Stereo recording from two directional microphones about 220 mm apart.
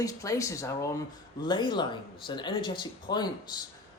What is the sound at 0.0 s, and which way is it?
Speech, 15° left (ahead or behind).